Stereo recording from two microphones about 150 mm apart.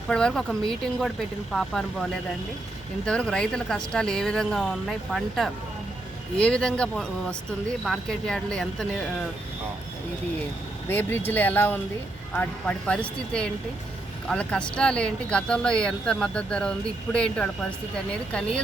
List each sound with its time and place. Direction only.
0.1 s speech: 5° left (ahead or behind)
3.1 s speech: 5° left (ahead or behind)
10.8 s speech: 15° left (ahead or behind)